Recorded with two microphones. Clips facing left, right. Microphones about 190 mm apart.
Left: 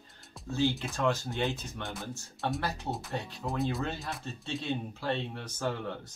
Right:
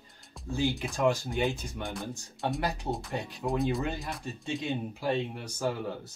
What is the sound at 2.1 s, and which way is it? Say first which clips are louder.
Speech: right 1 dB; 15° right (ahead or behind).